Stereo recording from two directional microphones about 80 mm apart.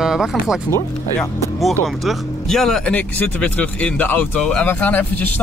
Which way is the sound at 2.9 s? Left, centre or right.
Centre.